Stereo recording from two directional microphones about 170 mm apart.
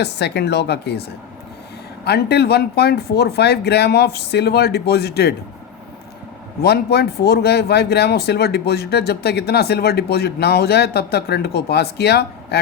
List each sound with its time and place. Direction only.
0.0 s speech: 75° left (ahead or behind)
2.0 s speech: 70° left (ahead or behind)
6.6 s speech: 70° left (ahead or behind)